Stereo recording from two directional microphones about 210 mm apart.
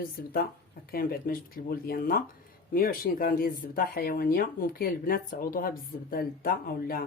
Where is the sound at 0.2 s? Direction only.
50° left (ahead or behind).